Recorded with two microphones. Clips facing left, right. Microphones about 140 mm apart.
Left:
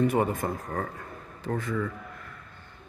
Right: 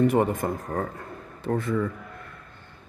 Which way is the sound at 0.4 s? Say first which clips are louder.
Right 3 dB; 25° right (ahead or behind).